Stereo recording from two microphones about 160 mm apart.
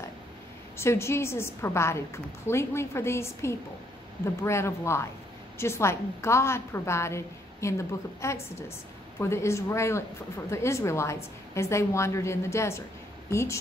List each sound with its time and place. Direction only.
0.7 s a woman's voice: 15° left (ahead or behind)